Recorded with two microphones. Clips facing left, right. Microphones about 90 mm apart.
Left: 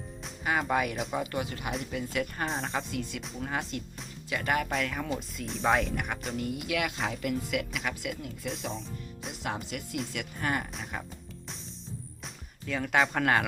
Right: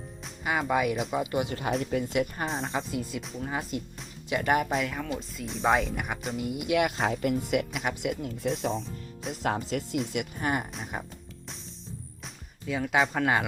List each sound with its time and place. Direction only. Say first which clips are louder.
0.4 s speech: right 2 dB; 5° right (ahead or behind)
1.3 s speech: right 4 dB; 20° right (ahead or behind)
1.8 s speech: right 6 dB; 40° right (ahead or behind)
2.5 s speech: right 2 dB; centre (ahead or behind)
4.3 s speech: right 4 dB; 25° right (ahead or behind)
4.7 s speech: right 2 dB; centre (ahead or behind)
6.7 s speech: right 8 dB; 30° right (ahead or behind)
8.7 s music: right 5 dB; centre (ahead or behind)
9.4 s speech: right 6 dB; 40° right (ahead or behind)
10.1 s speech: right 3 dB; 20° right (ahead or behind)
12.6 s speech: right 1 dB; 5° right (ahead or behind)